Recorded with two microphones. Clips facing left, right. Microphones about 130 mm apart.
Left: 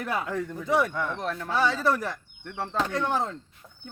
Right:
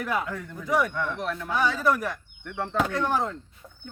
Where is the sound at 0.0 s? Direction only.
30° left (ahead or behind).